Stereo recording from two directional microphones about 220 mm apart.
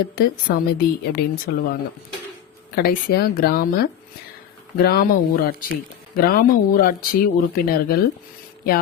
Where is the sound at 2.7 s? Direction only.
45° left (ahead or behind).